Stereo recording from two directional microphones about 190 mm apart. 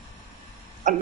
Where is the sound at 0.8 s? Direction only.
40° right (ahead or behind).